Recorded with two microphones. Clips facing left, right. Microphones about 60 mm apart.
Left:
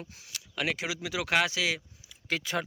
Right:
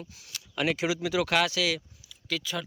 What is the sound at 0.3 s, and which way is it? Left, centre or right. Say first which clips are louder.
Speech: right 4 dB; centre.